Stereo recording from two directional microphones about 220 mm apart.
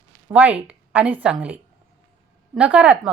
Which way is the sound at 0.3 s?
5° right (ahead or behind).